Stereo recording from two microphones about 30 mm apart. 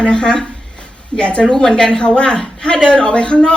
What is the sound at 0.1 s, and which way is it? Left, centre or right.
A woman's voice, left.